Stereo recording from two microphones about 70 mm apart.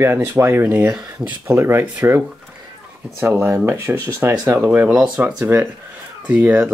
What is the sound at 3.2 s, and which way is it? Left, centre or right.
Speech, right.